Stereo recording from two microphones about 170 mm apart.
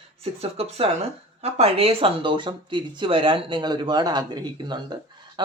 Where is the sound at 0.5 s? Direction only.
35° right (ahead or behind).